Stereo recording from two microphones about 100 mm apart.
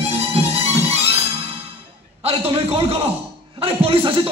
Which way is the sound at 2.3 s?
75° right (ahead or behind).